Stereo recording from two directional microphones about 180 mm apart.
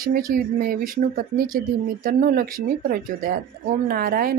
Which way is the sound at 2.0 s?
50° right (ahead or behind).